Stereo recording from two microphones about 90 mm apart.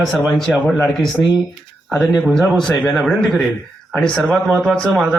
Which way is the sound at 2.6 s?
5° left (ahead or behind).